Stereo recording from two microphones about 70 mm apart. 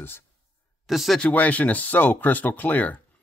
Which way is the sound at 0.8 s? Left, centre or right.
Centre.